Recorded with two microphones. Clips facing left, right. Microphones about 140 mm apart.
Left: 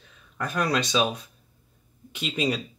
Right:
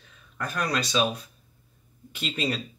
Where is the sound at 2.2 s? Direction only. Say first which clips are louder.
Left 3 dB; 15° left (ahead or behind).